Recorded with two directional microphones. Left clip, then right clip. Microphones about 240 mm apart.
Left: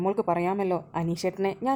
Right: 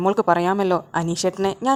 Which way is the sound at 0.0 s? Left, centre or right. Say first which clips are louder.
Right 7 dB; centre.